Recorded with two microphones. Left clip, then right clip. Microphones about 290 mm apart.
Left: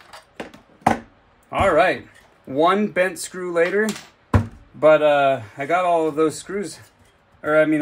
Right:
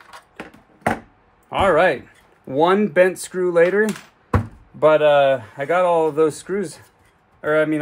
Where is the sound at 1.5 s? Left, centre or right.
Centre.